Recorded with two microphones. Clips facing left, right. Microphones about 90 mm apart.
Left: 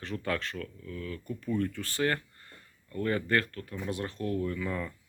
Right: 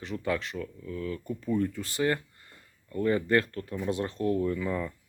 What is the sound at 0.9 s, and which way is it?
Speech, 25° right (ahead or behind).